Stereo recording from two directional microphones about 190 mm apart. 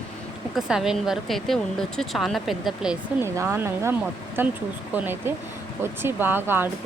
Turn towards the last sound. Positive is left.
turn(degrees=-10)  # may be behind; listen again after turning